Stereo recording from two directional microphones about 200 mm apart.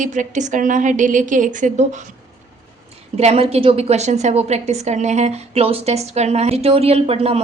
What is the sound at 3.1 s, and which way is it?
A woman's voice, 30° right (ahead or behind).